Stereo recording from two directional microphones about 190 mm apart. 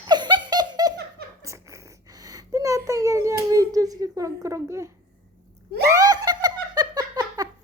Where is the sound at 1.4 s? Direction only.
15° right (ahead or behind).